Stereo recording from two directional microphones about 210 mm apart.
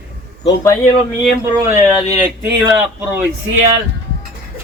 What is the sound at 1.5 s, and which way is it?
Speech, 15° right (ahead or behind).